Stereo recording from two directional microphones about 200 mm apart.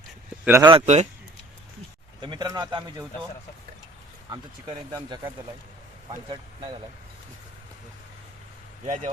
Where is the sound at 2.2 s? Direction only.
20° right (ahead or behind).